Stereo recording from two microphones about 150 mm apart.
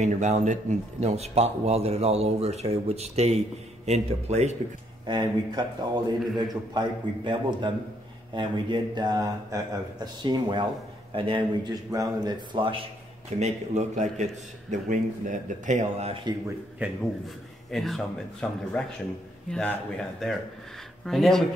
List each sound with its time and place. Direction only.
0.0 s speech: 50° right (ahead or behind)
5.0 s a man's voice: 30° right (ahead or behind)
13.4 s a man's voice: 50° right (ahead or behind)
16.8 s a man's voice: 10° right (ahead or behind)
17.6 s speech: centre (ahead or behind)